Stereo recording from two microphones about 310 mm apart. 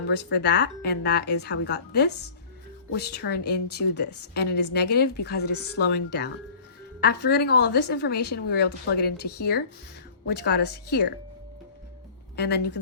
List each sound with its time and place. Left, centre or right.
0.1 s a woman's voice: left
12.4 s a woman's voice: left